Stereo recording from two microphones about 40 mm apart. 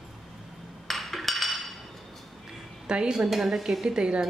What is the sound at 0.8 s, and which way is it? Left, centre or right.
Chink, centre.